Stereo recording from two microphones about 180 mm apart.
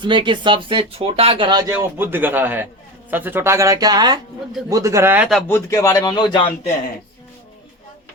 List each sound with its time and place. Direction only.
0.0 s speech: 25° right (ahead or behind); by 5.3 s 10° right (ahead or behind)
5.5 s speech: 15° left (ahead or behind)